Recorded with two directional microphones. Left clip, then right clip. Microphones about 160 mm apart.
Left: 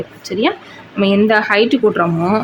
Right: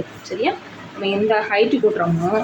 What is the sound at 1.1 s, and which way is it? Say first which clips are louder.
Speech: left 5 dB; 60° left (ahead or behind).